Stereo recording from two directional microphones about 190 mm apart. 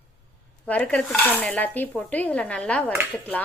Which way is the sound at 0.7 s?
5° left (ahead or behind).